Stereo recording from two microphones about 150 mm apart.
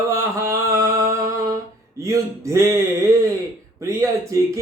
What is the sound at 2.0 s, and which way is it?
Speech, 20° right (ahead or behind).